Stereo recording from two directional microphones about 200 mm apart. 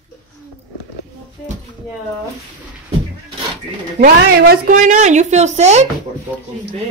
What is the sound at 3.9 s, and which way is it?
A woman's voice, 50° right (ahead or behind).